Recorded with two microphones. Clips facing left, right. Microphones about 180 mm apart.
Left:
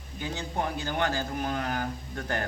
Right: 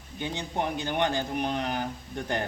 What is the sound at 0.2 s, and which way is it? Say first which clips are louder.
Speech: right 1 dB; 20° right (ahead or behind).